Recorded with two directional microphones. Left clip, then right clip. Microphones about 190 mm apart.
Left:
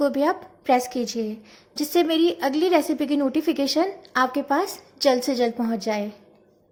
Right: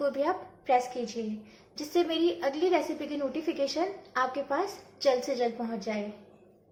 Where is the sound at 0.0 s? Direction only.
55° left (ahead or behind).